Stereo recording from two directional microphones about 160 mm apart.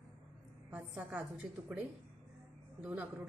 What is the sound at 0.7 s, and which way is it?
Speech, 10° right (ahead or behind).